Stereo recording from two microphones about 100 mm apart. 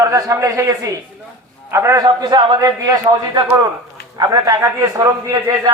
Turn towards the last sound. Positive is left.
turn(degrees=-35)  # may be behind; listen again after turning